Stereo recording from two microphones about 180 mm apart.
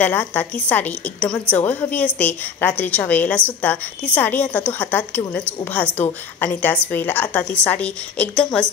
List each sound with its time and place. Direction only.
0.0 s a woman's voice: 10° left (ahead or behind)